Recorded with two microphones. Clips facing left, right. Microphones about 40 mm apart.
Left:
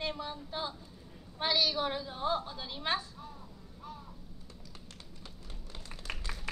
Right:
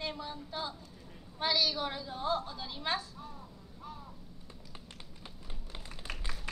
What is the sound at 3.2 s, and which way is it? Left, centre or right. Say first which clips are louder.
Crow: right 1 dB; centre.